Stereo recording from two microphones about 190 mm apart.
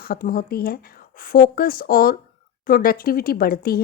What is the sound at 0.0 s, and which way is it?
Speech, 50° left (ahead or behind).